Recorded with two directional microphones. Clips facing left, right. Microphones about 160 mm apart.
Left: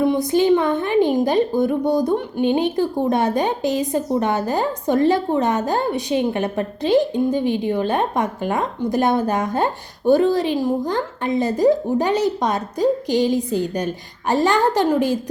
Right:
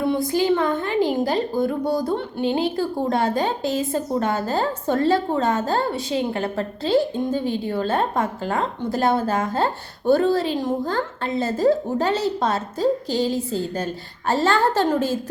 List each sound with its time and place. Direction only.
0.0 s a woman's voice: 20° left (ahead or behind)